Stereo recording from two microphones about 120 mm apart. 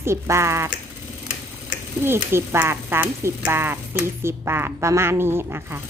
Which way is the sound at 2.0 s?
20° right (ahead or behind).